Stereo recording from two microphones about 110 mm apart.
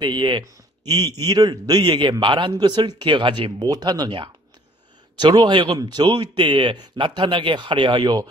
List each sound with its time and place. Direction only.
0.0 s a man's voice: 45° right (ahead or behind)